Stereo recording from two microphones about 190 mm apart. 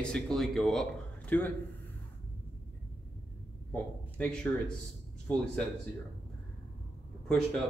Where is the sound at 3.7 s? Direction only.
10° left (ahead or behind).